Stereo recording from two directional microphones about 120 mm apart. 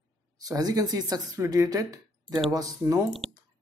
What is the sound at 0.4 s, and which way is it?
A woman's voice, 30° right (ahead or behind).